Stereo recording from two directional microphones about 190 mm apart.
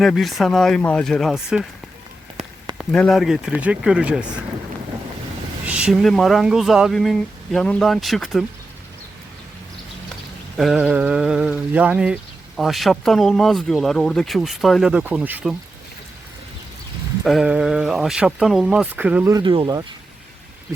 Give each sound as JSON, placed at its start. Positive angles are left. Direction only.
{"t": 0.0, "sound": "speech", "side_deg": 0}
{"t": 2.7, "sound": "speech", "side_deg": 0}
{"t": 5.6, "sound": "speech", "side_deg": -5}
{"t": 10.6, "sound": "speech", "side_deg": 0}
{"t": 17.2, "sound": "speech", "side_deg": -5}
{"t": 19.3, "sound": "speech", "side_deg": -25}